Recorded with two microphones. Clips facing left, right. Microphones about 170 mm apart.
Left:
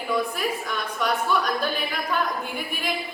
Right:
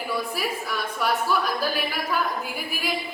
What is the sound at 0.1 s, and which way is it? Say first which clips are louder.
A woman's voice: left 4 dB; 5° right (ahead or behind).